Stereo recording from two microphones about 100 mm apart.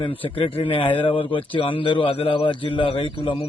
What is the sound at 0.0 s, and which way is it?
Speech, 60° left (ahead or behind).